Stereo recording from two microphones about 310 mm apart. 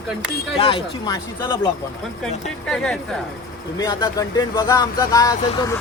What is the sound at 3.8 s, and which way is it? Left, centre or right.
Speech, centre.